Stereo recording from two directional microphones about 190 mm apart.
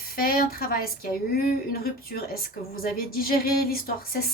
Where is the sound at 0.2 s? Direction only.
50° left (ahead or behind).